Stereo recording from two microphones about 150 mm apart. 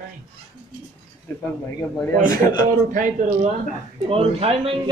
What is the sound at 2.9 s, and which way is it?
Speech, 55° right (ahead or behind).